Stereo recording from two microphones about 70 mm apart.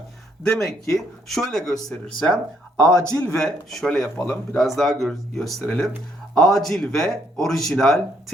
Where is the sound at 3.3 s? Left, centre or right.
Centre.